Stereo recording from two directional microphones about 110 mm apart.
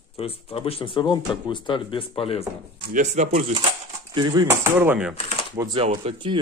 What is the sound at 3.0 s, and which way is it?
Speech, 90° right.